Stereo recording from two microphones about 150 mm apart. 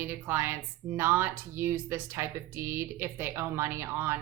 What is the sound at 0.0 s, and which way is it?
Speech, 15° right (ahead or behind).